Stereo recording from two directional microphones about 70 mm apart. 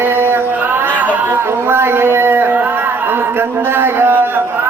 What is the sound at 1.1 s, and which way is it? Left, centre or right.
Speech, right.